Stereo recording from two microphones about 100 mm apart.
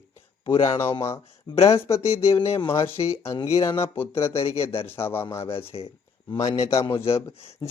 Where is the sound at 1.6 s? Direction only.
30° left (ahead or behind).